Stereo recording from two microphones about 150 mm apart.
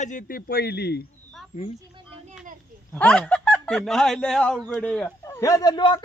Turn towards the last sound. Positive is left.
turn(degrees=30)  # may be behind; listen again after turning